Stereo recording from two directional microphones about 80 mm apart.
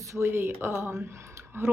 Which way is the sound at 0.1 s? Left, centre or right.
Right.